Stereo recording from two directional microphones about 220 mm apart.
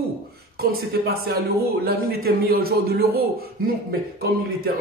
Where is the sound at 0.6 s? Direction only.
45° right (ahead or behind).